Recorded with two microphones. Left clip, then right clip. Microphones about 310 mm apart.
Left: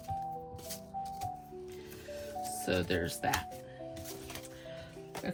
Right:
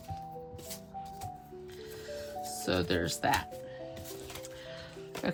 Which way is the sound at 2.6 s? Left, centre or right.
Centre.